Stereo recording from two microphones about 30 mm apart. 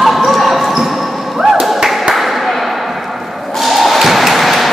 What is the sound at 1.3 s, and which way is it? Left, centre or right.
Ping, centre.